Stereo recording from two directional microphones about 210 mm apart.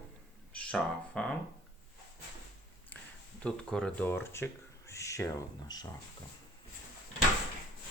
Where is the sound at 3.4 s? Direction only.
5° left (ahead or behind).